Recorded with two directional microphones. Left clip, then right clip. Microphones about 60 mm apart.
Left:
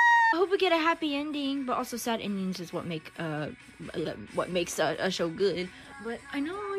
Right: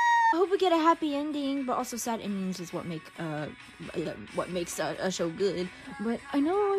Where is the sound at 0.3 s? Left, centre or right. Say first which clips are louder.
Even; right.